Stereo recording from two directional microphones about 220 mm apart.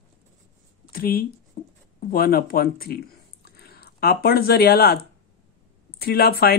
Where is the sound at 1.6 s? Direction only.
45° left (ahead or behind).